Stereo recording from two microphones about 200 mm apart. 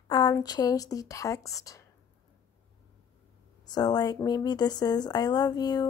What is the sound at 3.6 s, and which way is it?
Speech, 20° left (ahead or behind).